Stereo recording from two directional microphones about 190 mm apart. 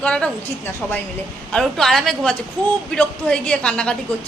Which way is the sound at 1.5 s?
Centre (ahead or behind).